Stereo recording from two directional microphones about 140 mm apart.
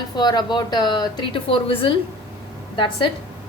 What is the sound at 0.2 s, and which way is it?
A woman's voice, 30° left (ahead or behind).